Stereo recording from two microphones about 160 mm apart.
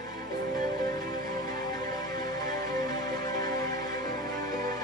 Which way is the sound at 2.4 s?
25° left (ahead or behind).